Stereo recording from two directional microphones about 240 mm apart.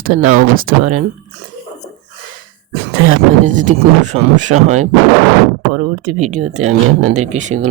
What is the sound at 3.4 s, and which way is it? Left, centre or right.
Speech, right.